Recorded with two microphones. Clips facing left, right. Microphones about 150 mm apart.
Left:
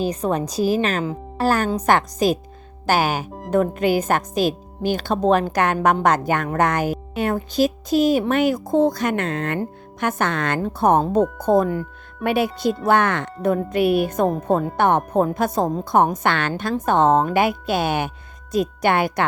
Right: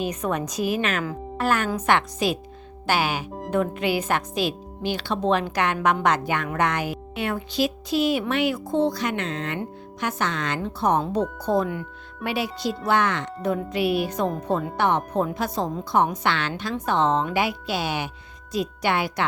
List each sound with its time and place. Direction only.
0.0 s a woman's voice: 30° left (ahead or behind)
12.2 s a woman's voice: 50° left (ahead or behind)